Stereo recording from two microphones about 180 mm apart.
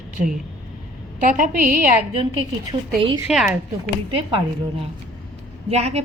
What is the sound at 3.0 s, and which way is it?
Speech, 25° right (ahead or behind).